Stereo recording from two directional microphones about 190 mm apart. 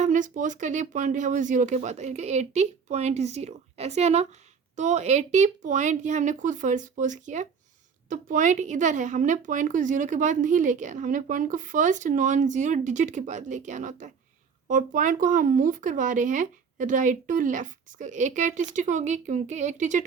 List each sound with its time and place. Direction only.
0.0 s a woman's voice: 40° right (ahead or behind)